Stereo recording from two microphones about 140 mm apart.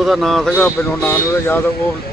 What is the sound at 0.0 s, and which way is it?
Speech, centre (ahead or behind).